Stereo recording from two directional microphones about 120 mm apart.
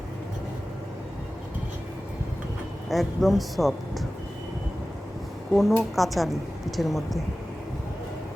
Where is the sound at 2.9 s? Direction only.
Centre (ahead or behind).